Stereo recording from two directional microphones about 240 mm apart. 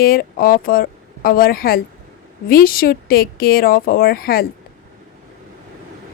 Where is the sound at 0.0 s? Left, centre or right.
Left.